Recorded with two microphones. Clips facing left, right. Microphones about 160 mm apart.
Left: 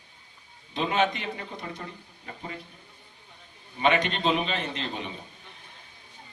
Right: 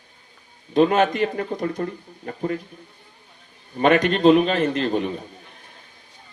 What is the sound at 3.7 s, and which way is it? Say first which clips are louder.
A man's voice: right 7 dB; 45° right (ahead or behind).